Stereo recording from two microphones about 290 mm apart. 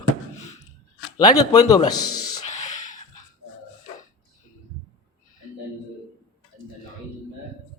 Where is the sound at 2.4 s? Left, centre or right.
Left.